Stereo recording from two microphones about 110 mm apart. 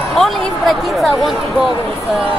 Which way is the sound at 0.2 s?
Centre (ahead or behind).